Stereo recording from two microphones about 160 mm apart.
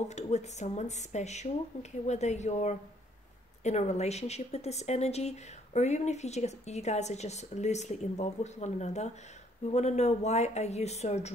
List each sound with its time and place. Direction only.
0.1 s speech: 45° left (ahead or behind)